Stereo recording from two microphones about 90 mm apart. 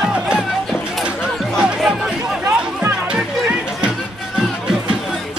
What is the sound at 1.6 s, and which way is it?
Music, 5° right (ahead or behind).